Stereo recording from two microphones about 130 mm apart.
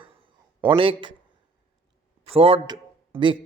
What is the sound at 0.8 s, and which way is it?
Speech, 45° right (ahead or behind).